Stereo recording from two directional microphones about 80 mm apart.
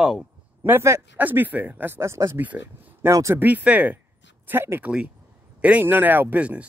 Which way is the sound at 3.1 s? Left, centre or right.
Right.